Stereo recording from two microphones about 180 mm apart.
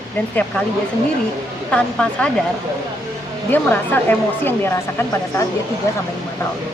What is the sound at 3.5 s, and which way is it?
Speech, 10° left (ahead or behind).